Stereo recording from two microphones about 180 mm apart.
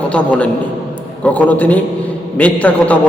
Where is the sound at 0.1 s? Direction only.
5° left (ahead or behind).